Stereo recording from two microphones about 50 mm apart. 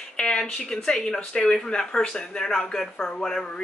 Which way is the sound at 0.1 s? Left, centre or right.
Centre.